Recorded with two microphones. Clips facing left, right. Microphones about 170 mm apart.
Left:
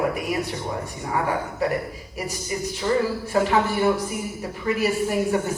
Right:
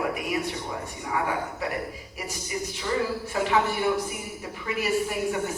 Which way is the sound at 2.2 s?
40° left (ahead or behind).